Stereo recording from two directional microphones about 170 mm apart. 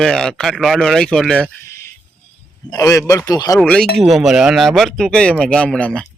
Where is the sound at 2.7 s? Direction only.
20° left (ahead or behind).